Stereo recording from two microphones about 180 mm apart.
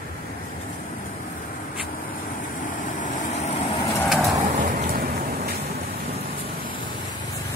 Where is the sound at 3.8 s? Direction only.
15° left (ahead or behind).